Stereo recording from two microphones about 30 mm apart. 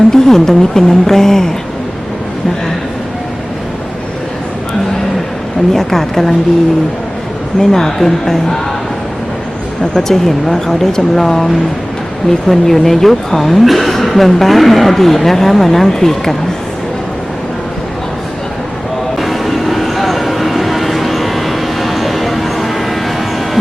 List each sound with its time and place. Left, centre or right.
0.1 s a woman's voice: centre
5.7 s a woman's voice: centre
7.6 s a woman's voice: centre
10.0 s a woman's voice: centre
12.5 s a woman's voice: centre
19.2 s vehicle: centre